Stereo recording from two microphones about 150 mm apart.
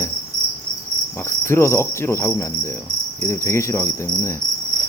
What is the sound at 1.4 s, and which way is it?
Cricket, 15° left (ahead or behind).